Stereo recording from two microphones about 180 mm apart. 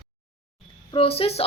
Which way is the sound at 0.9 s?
30° left (ahead or behind).